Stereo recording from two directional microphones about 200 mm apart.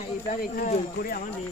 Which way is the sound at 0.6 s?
45° left (ahead or behind).